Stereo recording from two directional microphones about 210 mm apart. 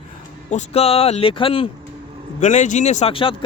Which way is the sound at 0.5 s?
30° left (ahead or behind).